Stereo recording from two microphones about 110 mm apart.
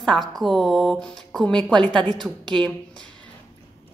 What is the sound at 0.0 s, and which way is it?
A woman's voice, centre (ahead or behind).